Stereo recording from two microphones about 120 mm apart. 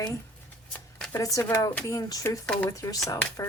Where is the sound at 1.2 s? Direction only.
25° left (ahead or behind).